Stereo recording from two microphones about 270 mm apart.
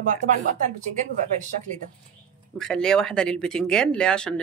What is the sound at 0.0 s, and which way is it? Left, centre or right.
Speech, right.